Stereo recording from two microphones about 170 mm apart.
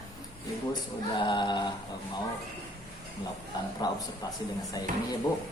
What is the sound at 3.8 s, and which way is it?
Speech, 25° left (ahead or behind).